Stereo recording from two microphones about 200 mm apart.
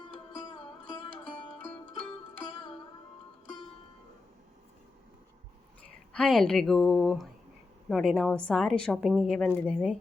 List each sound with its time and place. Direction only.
0.0 s sitar: 25° left (ahead or behind)
1.3 s music: 30° left (ahead or behind)
6.1 s a woman's voice: centre (ahead or behind)